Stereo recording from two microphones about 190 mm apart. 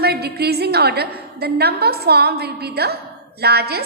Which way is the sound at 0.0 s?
55° right (ahead or behind).